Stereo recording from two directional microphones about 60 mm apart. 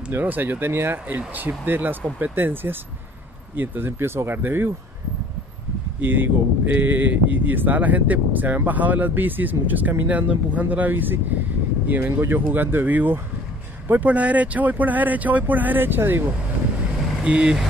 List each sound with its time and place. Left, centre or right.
0.1 s speech: right
5.9 s speech: right
12.2 s speech: right
17.2 s speech: centre